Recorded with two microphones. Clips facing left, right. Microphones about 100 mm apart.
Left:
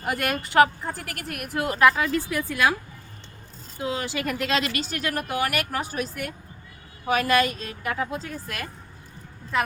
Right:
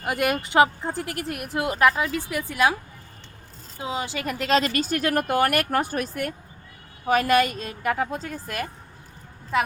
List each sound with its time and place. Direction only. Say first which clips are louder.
0.0 s speech: right 3 dB; 15° right (ahead or behind)
3.8 s speech: left 1 dB; 20° right (ahead or behind)
4.4 s speech: right 8 dB; 40° right (ahead or behind)